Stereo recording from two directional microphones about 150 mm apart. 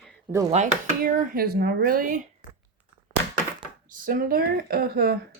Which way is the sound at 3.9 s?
70° right (ahead or behind).